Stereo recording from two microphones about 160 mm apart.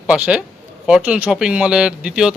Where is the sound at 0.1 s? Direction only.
5° right (ahead or behind).